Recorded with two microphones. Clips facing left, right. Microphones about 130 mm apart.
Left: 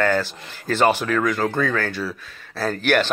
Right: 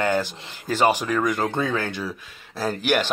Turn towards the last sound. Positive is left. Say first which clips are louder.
# left 2 dB
turn(degrees=-15)  # may be behind; listen again after turning